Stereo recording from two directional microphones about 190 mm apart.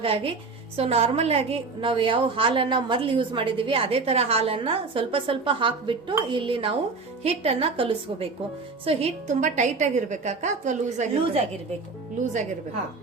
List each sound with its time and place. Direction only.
0.0 s a woman's voice: 30° right (ahead or behind)